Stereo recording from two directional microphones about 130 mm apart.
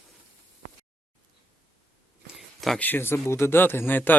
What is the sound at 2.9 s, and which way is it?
A man's voice, 15° left (ahead or behind).